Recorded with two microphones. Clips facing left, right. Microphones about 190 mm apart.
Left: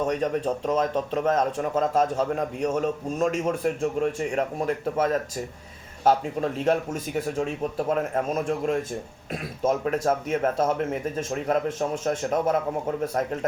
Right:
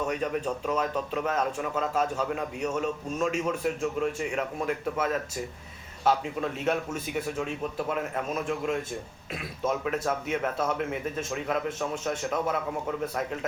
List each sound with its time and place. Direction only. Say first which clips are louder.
0.0 s a man's voice: left 4 dB; 35° left (ahead or behind)